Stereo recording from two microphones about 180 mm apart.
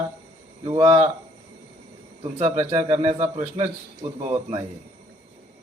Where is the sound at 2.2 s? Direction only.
35° right (ahead or behind).